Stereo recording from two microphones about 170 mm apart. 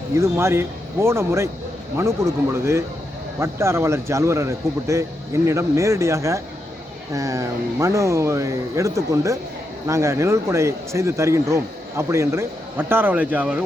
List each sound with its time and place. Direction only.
0.1 s speech: 15° right (ahead or behind)